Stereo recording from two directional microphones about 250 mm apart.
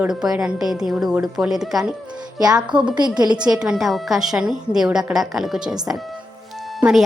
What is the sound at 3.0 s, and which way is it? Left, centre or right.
Speech, centre.